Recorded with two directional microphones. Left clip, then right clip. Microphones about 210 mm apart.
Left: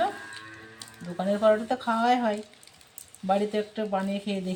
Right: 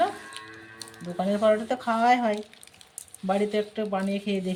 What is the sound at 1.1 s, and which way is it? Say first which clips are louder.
Speech: even; 25° right (ahead or behind).